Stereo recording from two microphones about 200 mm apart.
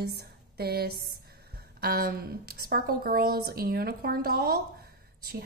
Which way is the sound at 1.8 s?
50° right (ahead or behind).